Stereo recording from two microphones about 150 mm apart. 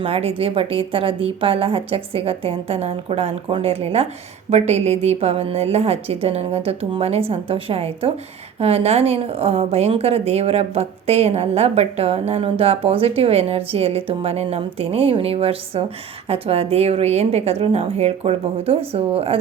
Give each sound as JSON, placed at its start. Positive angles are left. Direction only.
{"t": 0.0, "sound": "a woman's voice", "side_deg": -40}